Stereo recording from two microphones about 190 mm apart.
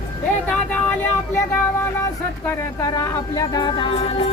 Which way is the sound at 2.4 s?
15° left (ahead or behind).